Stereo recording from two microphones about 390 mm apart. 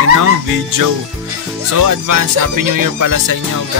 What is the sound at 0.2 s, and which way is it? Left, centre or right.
Speech, right.